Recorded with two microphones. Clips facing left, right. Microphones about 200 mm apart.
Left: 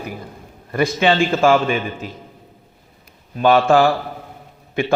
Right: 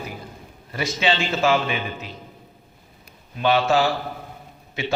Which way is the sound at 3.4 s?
50° left (ahead or behind).